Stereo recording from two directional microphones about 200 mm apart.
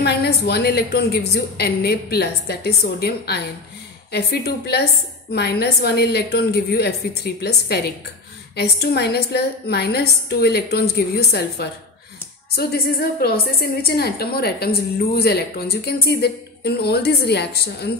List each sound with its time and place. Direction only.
0.0 s a woman's voice: 55° left (ahead or behind)